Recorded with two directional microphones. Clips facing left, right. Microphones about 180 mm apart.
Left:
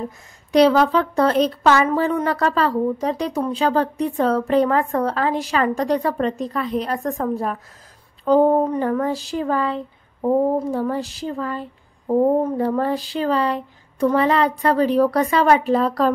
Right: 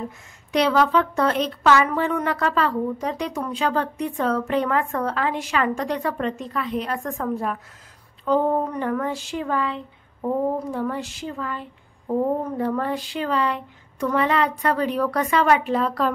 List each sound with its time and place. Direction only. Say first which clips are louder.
0.5 s a woman's voice: left 5 dB; 35° left (ahead or behind)